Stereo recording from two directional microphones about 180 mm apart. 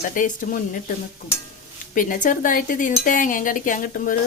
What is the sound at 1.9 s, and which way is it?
Speech, 50° left (ahead or behind).